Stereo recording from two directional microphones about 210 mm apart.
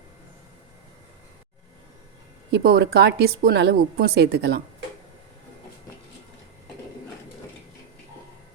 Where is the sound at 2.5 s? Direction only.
55° right (ahead or behind).